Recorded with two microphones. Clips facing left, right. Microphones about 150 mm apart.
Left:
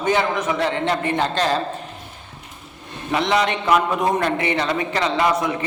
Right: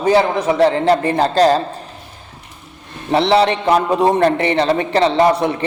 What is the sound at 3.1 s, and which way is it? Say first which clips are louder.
A man's voice: right 6 dB; 30° right (ahead or behind).